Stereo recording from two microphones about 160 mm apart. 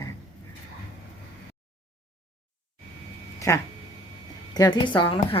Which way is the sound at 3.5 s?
20° left (ahead or behind).